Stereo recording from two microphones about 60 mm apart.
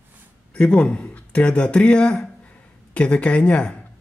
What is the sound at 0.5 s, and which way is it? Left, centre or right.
Speech, centre.